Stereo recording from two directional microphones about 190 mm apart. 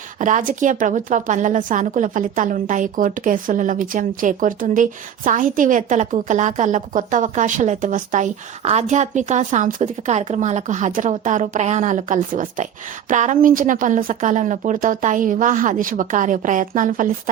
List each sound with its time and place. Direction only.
0.2 s a woman's voice: 40° right (ahead or behind)